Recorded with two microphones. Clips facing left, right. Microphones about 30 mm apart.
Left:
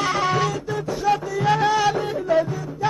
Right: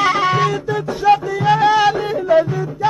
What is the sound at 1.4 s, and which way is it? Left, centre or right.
Music, right.